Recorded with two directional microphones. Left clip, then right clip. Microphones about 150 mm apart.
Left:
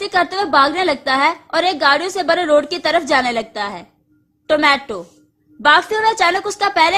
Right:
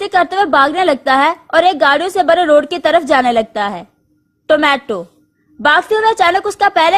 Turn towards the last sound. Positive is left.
turn(degrees=-35)  # may be behind; listen again after turning